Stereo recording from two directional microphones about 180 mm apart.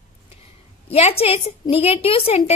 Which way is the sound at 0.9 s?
35° left (ahead or behind).